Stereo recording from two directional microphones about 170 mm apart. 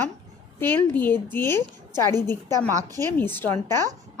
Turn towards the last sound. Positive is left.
turn(degrees=15)  # may be behind; listen again after turning